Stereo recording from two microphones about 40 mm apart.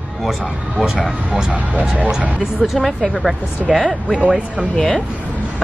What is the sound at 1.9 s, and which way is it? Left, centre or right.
Speech, right.